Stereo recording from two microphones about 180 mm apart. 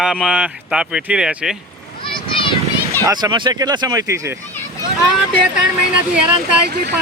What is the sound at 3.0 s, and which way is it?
Speech, 20° right (ahead or behind).